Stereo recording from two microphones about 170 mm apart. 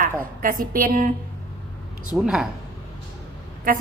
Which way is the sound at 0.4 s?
55° right (ahead or behind).